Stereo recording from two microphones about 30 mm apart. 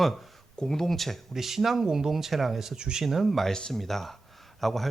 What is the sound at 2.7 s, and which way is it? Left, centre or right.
Speech, right.